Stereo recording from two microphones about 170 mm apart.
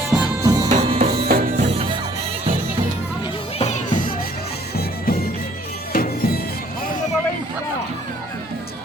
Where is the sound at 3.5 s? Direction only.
40° left (ahead or behind); by 6.6 s 65° left (ahead or behind).